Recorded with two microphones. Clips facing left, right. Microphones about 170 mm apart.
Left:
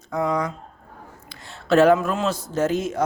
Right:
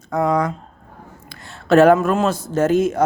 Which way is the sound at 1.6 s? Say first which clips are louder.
Right 4 dB; 50° right (ahead or behind).